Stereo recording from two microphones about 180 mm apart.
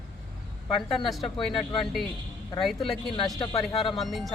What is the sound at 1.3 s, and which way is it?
Speech, 30° left (ahead or behind).